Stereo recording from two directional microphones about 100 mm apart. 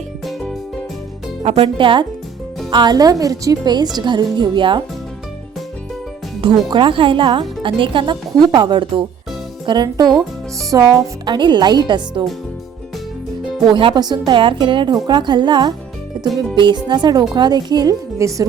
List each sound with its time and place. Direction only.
0.3 s music: 5° left (ahead or behind)
1.5 s speech: 65° right (ahead or behind)
2.6 s speech: 45° right (ahead or behind)
6.7 s speech: 55° right (ahead or behind)
13.7 s speech: 50° right (ahead or behind)
16.1 s music: 45° right (ahead or behind)
16.6 s speech: 50° right (ahead or behind)
18.2 s speech: 35° right (ahead or behind)